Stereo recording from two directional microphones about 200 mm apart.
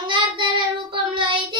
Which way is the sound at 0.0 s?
25° right (ahead or behind).